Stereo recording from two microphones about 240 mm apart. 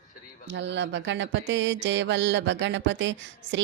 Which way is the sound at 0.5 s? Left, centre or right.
Right.